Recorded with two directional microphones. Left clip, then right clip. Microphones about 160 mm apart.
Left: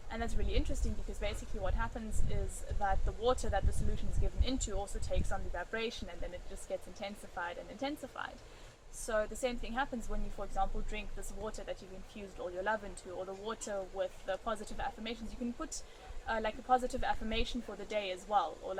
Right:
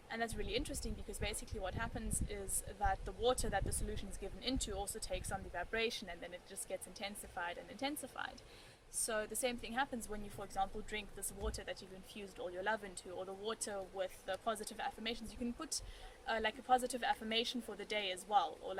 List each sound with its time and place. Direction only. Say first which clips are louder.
0.1 s speech: even; 15° right (ahead or behind)